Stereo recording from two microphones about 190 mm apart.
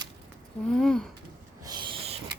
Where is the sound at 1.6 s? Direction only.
20° right (ahead or behind).